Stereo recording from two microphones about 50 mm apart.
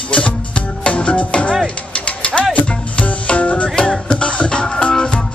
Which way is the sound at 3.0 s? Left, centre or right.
Left.